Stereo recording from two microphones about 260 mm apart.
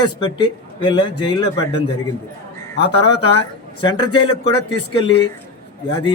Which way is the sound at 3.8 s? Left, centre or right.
Centre.